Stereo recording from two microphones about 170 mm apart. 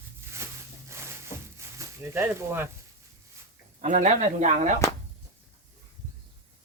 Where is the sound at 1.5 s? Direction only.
15° right (ahead or behind).